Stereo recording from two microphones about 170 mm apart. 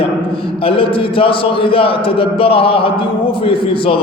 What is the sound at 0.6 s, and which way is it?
A man's voice, 30° left (ahead or behind).